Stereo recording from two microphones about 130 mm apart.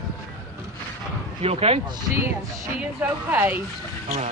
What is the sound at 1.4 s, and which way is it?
Speech, 50° right (ahead or behind).